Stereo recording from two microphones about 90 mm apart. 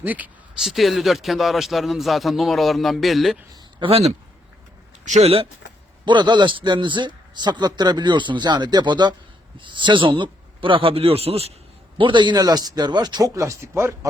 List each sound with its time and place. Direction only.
0.0 s speech: 20° right (ahead or behind)
0.6 s speech: centre (ahead or behind)
3.8 s a man's voice: 65° right (ahead or behind)
6.1 s a man's voice: 60° right (ahead or behind); by 11.3 s 90° right
11.9 s speech: 65° right (ahead or behind); by 14.1 s 30° right (ahead or behind)